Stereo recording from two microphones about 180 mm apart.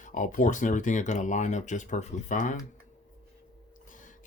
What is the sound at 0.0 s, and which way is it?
Speech, 45° left (ahead or behind).